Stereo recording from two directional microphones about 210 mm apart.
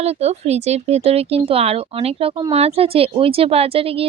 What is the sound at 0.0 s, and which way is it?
Speech, 30° right (ahead or behind).